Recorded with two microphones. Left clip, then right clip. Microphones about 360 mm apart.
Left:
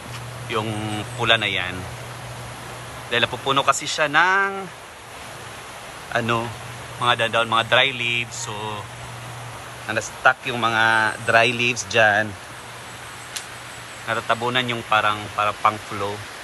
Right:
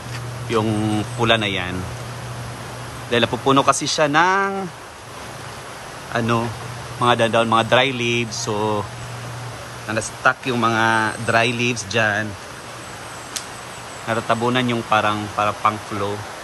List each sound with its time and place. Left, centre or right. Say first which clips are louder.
0.5 s a man's voice: right 5 dB; centre
3.1 s a man's voice: right 3 dB; centre
6.1 s a man's voice: right 1 dB; centre
9.8 s a man's voice: even; centre
14.0 s a man's voice: right 2 dB; centre